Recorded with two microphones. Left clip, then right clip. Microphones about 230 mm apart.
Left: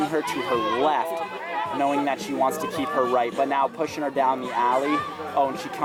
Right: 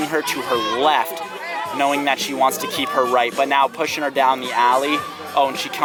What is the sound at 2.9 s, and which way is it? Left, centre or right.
Speech, centre.